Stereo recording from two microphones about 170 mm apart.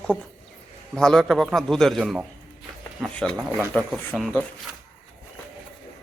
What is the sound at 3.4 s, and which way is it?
Speech, 5° right (ahead or behind).